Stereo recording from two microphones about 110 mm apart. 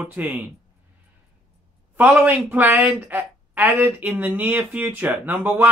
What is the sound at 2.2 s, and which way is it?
Speech, 15° right (ahead or behind).